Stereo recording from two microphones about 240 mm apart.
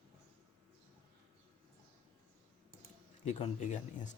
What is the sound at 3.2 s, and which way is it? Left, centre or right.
Speech, left.